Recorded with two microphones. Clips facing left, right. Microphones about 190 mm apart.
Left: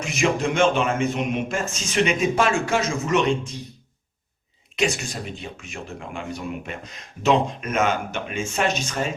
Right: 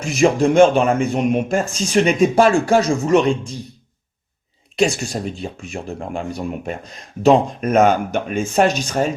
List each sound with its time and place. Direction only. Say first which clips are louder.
0.0 s a man's voice: right 7 dB; 35° right (ahead or behind)
4.8 s a man's voice: right 6 dB; 35° right (ahead or behind)